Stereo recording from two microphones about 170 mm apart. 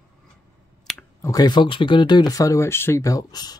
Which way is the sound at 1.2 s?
25° left (ahead or behind).